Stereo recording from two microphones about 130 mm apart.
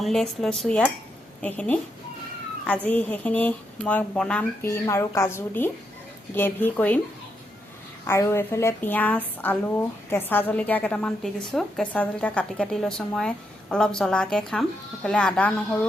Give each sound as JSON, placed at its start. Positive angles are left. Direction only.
{"t": 0.0, "sound": "a woman's voice", "side_deg": 5}
{"t": 4.6, "sound": "a woman's voice", "side_deg": 20}
{"t": 8.0, "sound": "a woman's voice", "side_deg": 20}